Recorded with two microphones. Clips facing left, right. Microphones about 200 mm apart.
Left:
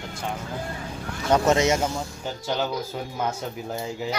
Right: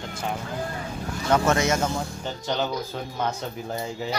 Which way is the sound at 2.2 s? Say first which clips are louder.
Left 2 dB; 5° left (ahead or behind).